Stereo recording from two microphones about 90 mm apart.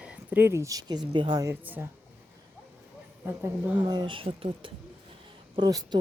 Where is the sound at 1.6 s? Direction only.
20° right (ahead or behind).